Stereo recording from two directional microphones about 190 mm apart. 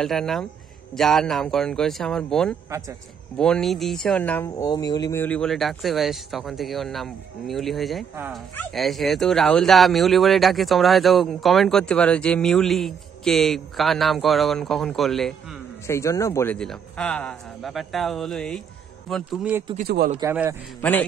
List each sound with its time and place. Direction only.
0.0 s speech: centre (ahead or behind)
15.9 s a man's voice: 15° left (ahead or behind); by 19.6 s 5° right (ahead or behind)
19.8 s a man's voice: 55° right (ahead or behind)
20.2 s a man's voice: 15° right (ahead or behind)